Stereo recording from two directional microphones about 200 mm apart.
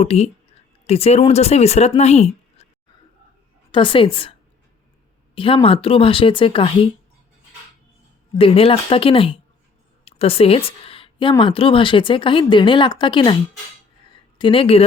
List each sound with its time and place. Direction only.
0.0 s speech: 30° left (ahead or behind)
3.7 s speech: 25° left (ahead or behind)
8.4 s speech: 30° left (ahead or behind)
14.3 s speech: 25° left (ahead or behind)